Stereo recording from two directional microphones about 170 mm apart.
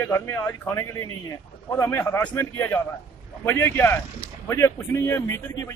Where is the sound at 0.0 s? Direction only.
15° left (ahead or behind).